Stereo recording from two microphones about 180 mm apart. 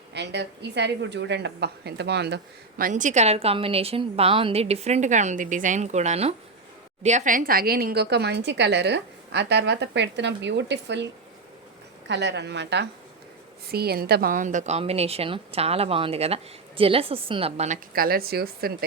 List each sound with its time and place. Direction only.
0.1 s a woman's voice: 70° right (ahead or behind)
13.7 s a woman's voice: 60° right (ahead or behind); by 17.7 s 35° right (ahead or behind)
17.9 s a woman's voice: 55° right (ahead or behind)